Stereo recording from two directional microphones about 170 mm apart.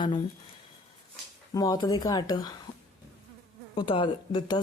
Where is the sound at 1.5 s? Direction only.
25° left (ahead or behind).